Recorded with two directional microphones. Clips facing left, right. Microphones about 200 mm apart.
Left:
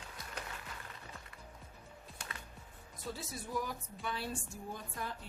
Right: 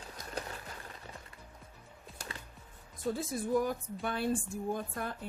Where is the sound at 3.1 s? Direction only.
50° right (ahead or behind).